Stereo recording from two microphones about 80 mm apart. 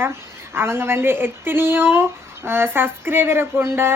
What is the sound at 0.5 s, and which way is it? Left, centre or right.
Speech, right.